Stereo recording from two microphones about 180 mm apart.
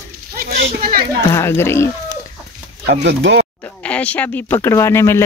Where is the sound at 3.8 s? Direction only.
5° left (ahead or behind).